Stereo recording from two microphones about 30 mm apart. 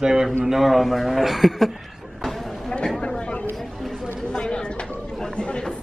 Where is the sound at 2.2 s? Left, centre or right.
Centre.